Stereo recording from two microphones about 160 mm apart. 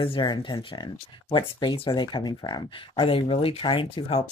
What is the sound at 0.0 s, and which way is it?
Speech, 30° left (ahead or behind).